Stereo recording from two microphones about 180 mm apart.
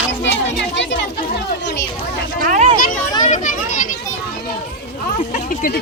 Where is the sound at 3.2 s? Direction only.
45° left (ahead or behind).